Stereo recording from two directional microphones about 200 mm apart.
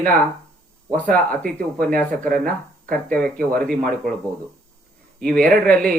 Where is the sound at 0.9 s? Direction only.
5° left (ahead or behind).